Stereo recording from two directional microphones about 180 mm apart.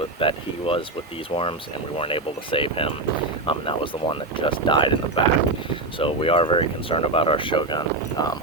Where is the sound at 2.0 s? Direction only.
30° left (ahead or behind).